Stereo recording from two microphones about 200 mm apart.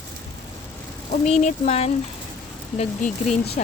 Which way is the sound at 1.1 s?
35° left (ahead or behind).